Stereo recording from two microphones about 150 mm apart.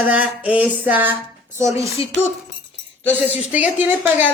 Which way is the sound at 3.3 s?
10° right (ahead or behind).